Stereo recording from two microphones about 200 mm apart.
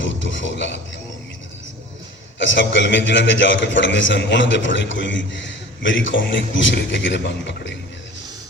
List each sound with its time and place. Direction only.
0.0 s a man's voice: 65° left (ahead or behind)
2.4 s a man's voice: 65° left (ahead or behind)